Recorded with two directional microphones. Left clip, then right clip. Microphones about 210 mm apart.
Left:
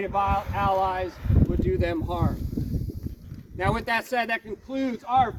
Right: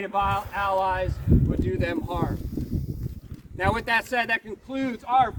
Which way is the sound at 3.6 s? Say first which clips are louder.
Right 2 dB; 15° left (ahead or behind).